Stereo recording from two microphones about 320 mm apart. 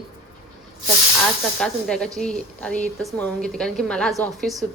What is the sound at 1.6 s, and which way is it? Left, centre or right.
A woman's voice, centre.